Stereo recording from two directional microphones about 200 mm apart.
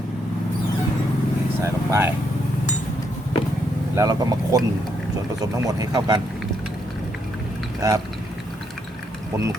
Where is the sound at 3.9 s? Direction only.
15° right (ahead or behind).